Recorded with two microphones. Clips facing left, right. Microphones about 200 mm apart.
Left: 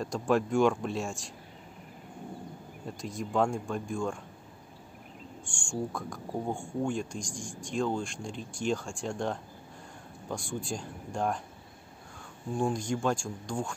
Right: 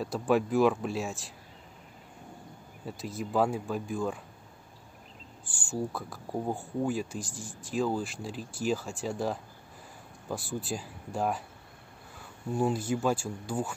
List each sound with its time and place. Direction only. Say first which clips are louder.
0.0 s speech: right 1 dB; 5° right (ahead or behind)
2.8 s speech: right 1 dB; 5° right (ahead or behind)
5.4 s speech: right 1 dB; 5° right (ahead or behind)
12.5 s speech: right 1 dB; 5° right (ahead or behind)